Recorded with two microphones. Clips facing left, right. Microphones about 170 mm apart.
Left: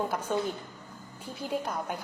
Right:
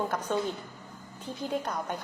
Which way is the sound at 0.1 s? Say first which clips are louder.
Even; 10° left (ahead or behind).